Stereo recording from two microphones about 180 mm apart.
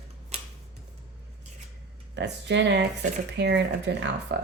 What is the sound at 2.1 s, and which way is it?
Speech, 80° right.